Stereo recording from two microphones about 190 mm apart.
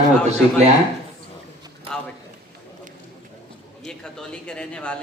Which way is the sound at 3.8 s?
5° left (ahead or behind).